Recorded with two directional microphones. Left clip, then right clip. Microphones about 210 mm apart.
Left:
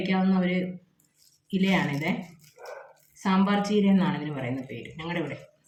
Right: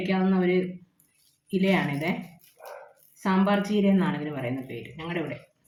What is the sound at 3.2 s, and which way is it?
A woman's voice, 10° left (ahead or behind).